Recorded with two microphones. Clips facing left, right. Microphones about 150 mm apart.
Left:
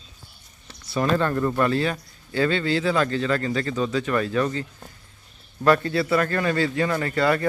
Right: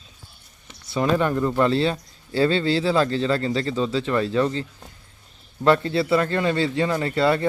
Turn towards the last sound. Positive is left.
turn(degrees=-25)  # may be behind; listen again after turning